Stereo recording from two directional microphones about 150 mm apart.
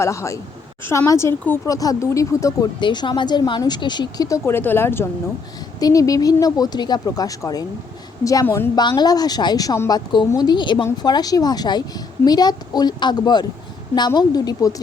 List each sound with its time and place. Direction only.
0.0 s speech: 20° left (ahead or behind)
8.7 s a woman's voice: 30° left (ahead or behind)